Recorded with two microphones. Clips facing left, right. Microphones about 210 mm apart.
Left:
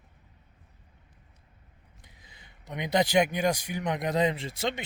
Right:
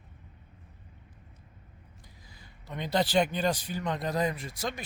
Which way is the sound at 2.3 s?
20° left (ahead or behind).